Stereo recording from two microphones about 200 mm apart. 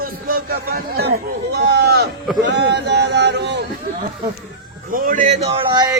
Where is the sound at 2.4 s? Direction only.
60° right (ahead or behind).